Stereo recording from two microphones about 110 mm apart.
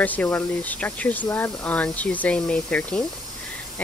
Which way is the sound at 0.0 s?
15° left (ahead or behind).